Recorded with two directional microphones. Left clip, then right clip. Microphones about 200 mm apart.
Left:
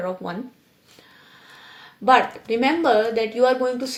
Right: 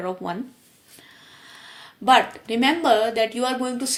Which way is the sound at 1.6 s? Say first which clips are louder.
Even; 40° right (ahead or behind).